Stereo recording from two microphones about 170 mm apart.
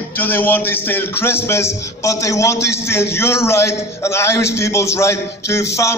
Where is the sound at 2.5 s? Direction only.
85° left.